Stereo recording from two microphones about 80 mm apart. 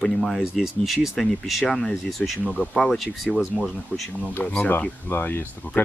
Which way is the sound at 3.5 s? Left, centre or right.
Centre.